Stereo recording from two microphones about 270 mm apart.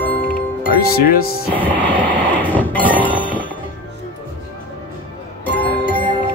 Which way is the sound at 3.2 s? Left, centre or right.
Centre.